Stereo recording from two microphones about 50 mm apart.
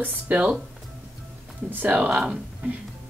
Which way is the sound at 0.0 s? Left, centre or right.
Right.